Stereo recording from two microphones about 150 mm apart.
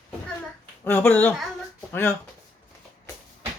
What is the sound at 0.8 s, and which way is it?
Speech, 15° left (ahead or behind).